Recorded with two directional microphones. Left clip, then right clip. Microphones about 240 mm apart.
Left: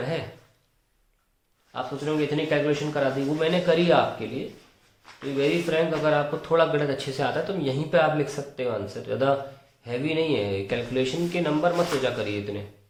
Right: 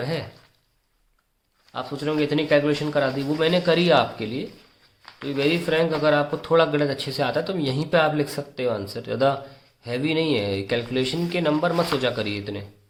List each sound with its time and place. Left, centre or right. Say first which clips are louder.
0.0 s speech: right 1 dB; right
1.7 s speech: right 2 dB; right